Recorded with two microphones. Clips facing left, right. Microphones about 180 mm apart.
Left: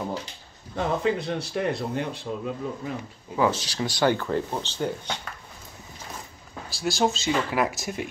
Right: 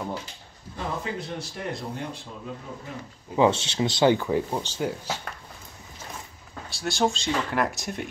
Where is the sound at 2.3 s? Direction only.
90° left.